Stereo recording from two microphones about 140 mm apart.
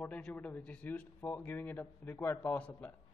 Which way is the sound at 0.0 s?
10° left (ahead or behind).